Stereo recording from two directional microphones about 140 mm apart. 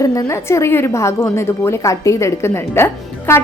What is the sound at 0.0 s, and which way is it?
A woman's voice, 25° left (ahead or behind).